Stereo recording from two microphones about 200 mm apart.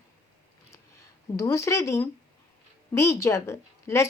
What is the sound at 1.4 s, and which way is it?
A woman's voice, 15° left (ahead or behind).